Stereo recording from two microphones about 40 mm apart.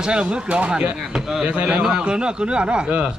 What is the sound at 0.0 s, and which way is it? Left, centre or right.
Speech, right.